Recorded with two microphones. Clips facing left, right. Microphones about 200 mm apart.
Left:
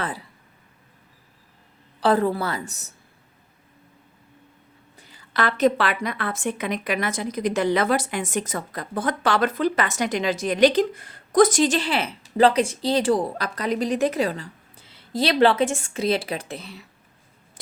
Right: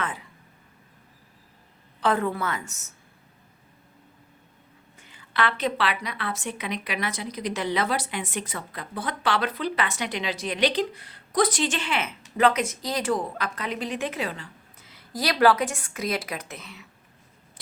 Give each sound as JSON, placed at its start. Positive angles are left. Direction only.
{"t": 0.0, "sound": "a sound", "side_deg": 35}
{"t": 2.0, "sound": "a woman's voice", "side_deg": 35}
{"t": 4.9, "sound": "a woman's voice", "side_deg": 35}